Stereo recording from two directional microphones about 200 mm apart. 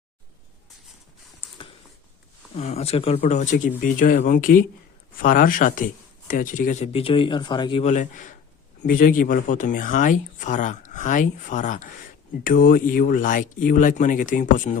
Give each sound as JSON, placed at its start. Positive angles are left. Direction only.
{"t": 2.6, "sound": "speech", "side_deg": 30}